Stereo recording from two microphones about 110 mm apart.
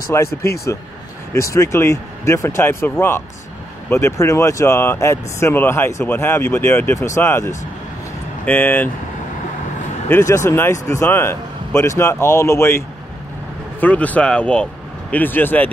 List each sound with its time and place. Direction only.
0.1 s speech: 25° left (ahead or behind)
10.2 s speech: 30° left (ahead or behind)